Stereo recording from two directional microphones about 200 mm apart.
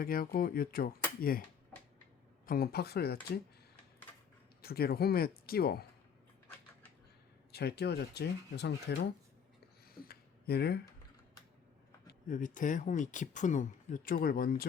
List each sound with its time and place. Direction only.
0.0 s speech: 45° left (ahead or behind)
2.5 s speech: 50° left (ahead or behind)
4.6 s speech: 50° left (ahead or behind)
7.5 s speech: 55° left (ahead or behind)
9.8 s a sound: 50° left (ahead or behind)
12.0 s speech: 40° left (ahead or behind)